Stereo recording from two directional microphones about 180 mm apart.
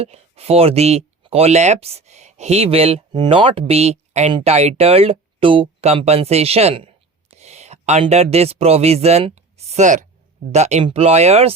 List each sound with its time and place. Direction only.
0.0 s speech: 35° right (ahead or behind)